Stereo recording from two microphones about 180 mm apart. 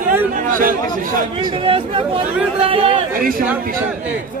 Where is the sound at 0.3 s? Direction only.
50° right (ahead or behind).